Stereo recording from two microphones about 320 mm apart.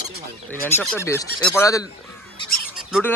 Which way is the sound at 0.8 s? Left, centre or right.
Centre.